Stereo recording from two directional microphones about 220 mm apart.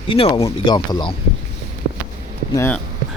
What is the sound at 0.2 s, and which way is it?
Speech, 25° left (ahead or behind).